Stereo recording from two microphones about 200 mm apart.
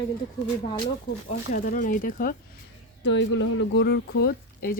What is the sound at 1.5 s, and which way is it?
Speech, 45° left (ahead or behind).